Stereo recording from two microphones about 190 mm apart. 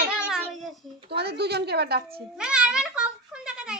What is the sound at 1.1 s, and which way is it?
Speech, 60° right (ahead or behind).